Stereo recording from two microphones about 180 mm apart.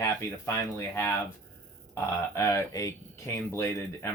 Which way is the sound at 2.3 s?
15° left (ahead or behind).